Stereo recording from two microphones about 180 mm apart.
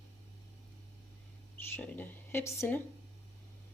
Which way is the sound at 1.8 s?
10° left (ahead or behind).